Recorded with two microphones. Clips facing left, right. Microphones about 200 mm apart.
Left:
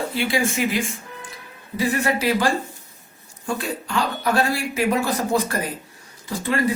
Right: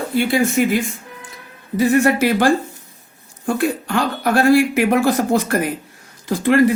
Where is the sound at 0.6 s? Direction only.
50° right (ahead or behind).